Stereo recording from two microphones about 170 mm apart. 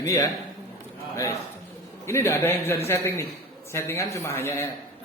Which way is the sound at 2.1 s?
15° left (ahead or behind).